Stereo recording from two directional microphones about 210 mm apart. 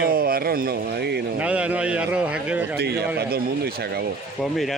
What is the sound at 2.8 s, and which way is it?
Speech, 50° right (ahead or behind).